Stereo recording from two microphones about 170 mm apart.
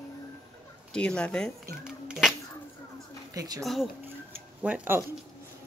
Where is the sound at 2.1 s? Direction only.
Centre (ahead or behind).